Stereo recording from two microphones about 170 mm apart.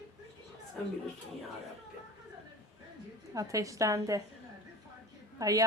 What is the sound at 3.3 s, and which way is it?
Speech, 20° right (ahead or behind).